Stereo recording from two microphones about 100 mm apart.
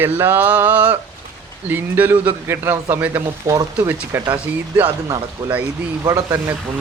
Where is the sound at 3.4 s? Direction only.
30° right (ahead or behind).